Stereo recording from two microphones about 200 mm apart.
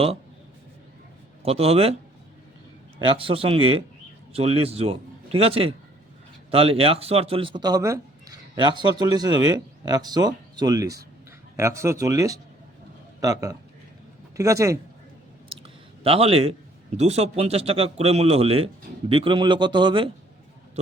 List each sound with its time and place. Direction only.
1.4 s speech: 30° right (ahead or behind)
3.1 s a man's voice: 25° right (ahead or behind)
16.0 s speech: 30° right (ahead or behind)